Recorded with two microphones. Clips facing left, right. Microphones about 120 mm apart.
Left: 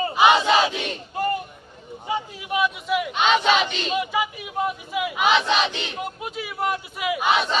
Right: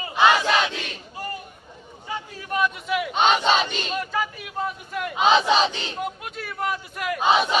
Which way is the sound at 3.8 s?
5° left (ahead or behind).